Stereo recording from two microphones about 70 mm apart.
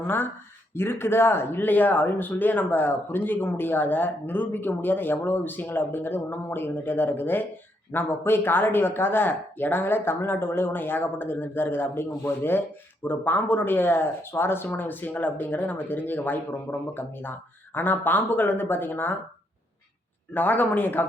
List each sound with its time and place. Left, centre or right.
0.7 s speech: left
20.3 s speech: left